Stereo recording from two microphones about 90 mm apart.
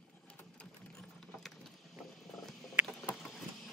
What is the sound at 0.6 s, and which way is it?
Sewing machine, 5° left (ahead or behind).